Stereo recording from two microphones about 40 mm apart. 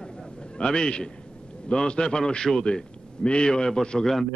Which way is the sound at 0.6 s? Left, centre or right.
Left.